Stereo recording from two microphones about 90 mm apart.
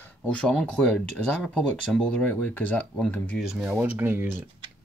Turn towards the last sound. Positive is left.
turn(degrees=-25)  # may be behind; listen again after turning